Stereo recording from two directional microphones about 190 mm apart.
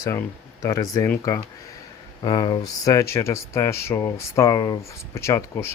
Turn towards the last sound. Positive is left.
turn(degrees=15)  # may be behind; listen again after turning